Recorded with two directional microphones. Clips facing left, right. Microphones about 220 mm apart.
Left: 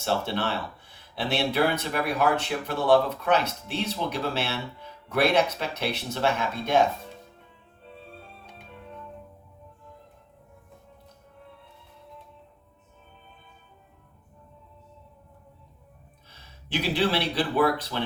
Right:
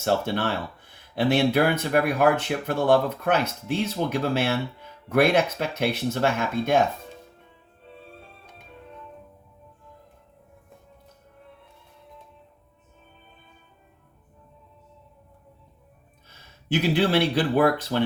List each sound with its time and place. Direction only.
0.0 s speech: 50° right (ahead or behind)
16.7 s speech: 50° right (ahead or behind)